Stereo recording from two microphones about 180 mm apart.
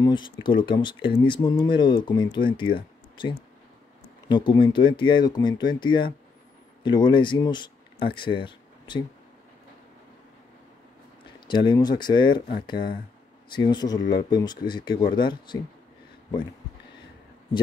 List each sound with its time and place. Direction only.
0.0 s speech: 25° left (ahead or behind)
11.3 s speech: 25° left (ahead or behind)
13.6 s speech: 25° left (ahead or behind)